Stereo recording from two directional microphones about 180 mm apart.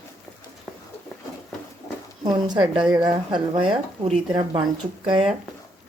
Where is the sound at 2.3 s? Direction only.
25° right (ahead or behind).